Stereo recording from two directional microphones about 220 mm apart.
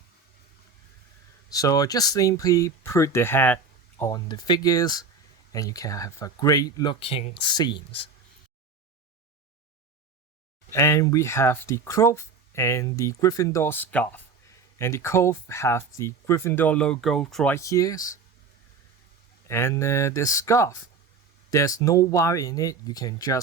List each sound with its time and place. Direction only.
1.5 s speech: 15° left (ahead or behind)
10.7 s speech: 10° left (ahead or behind)
19.5 s speech: 10° left (ahead or behind)